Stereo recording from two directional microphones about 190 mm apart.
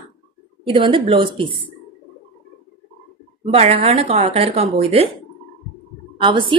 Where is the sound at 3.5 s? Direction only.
30° right (ahead or behind).